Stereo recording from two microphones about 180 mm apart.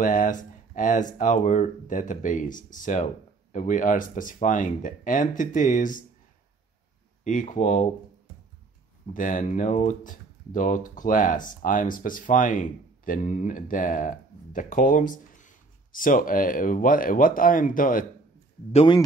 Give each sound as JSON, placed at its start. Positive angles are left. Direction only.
{"t": 0.0, "sound": "speech", "side_deg": 45}
{"t": 7.2, "sound": "speech", "side_deg": 45}
{"t": 9.1, "sound": "speech", "side_deg": 45}
{"t": 18.7, "sound": "speech", "side_deg": 35}